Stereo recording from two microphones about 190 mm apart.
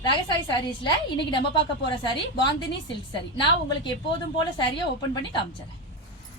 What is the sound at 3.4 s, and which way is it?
Speech, 25° left (ahead or behind).